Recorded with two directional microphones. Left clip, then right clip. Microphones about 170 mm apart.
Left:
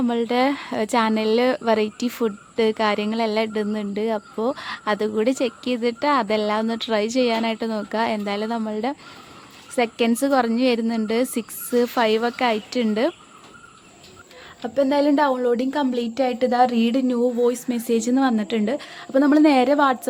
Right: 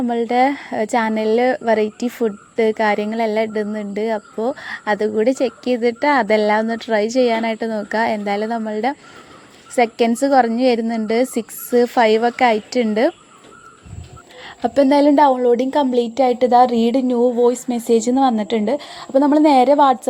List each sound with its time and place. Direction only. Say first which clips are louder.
0.1 s speech: right 7 dB; 5° right (ahead or behind)
14.4 s speech: right 6 dB; 35° right (ahead or behind); by 20.0 s 5° right (ahead or behind)